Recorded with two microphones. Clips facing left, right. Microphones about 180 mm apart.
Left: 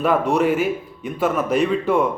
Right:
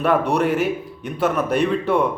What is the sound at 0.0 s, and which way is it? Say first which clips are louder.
A man's voice: left 1 dB; centre (ahead or behind).